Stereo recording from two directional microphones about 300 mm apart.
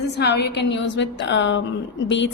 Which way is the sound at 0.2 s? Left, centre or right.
Left.